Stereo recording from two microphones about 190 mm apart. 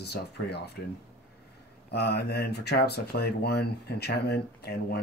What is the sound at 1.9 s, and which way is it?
Speech, 60° left (ahead or behind).